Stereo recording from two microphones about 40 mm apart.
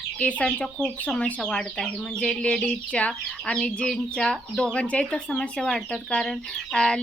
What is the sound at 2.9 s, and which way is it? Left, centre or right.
Speech, left.